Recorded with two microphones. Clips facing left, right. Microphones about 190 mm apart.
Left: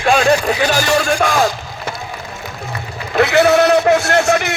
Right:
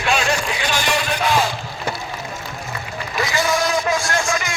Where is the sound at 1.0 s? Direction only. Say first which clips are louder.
Left 6 dB; 45° left (ahead or behind).